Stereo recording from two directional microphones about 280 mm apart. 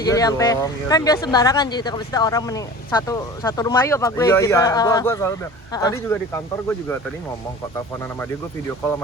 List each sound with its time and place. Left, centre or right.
0.0 s speech: centre